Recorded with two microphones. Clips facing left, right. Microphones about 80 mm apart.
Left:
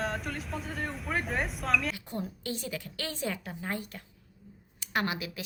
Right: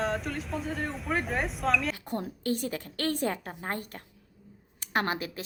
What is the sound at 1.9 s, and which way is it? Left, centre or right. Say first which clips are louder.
A woman's voice: right 3 dB; right.